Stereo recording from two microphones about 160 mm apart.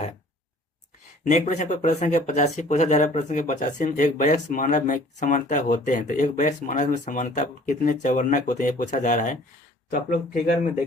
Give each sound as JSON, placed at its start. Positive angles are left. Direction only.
{"t": 1.2, "sound": "speech", "side_deg": 50}